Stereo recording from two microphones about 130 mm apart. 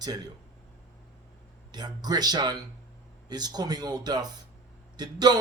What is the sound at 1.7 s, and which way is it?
Speech, 30° right (ahead or behind).